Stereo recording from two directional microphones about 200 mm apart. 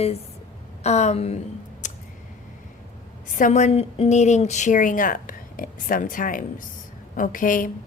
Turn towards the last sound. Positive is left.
turn(degrees=40)  # may be behind; listen again after turning